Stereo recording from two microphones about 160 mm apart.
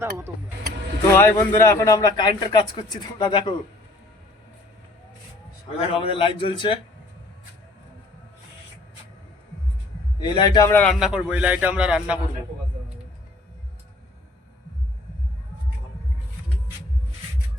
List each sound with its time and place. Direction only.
1.1 s a man's voice: 15° left (ahead or behind)
5.8 s a man's voice: 35° left (ahead or behind)
10.2 s a man's voice: 30° left (ahead or behind)
10.7 s a man's voice: 10° left (ahead or behind)
10.9 s a man's voice: 5° right (ahead or behind)